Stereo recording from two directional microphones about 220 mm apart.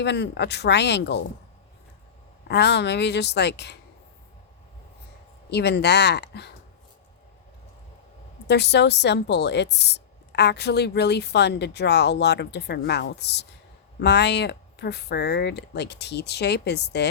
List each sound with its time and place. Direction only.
0.0 s a woman's voice: 50° left (ahead or behind)
2.5 s a woman's voice: 50° left (ahead or behind)
5.5 s a woman's voice: 50° left (ahead or behind)
8.4 s a woman's voice: 50° left (ahead or behind)